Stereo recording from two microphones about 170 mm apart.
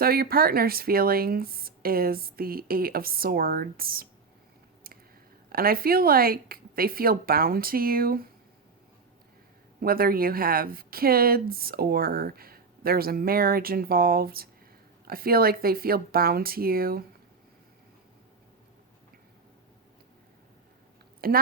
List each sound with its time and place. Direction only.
0.0 s speech: 60° right (ahead or behind)
5.5 s speech: 60° right (ahead or behind)
9.8 s speech: 60° right (ahead or behind)
21.2 s speech: 60° right (ahead or behind)